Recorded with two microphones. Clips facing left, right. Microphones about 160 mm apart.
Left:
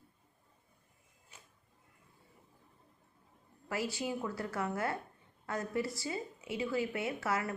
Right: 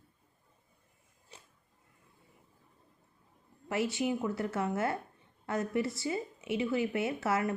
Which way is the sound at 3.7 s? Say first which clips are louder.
Right 5 dB; 25° right (ahead or behind).